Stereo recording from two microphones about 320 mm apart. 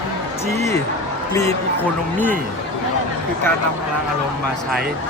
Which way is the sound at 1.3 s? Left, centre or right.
Centre.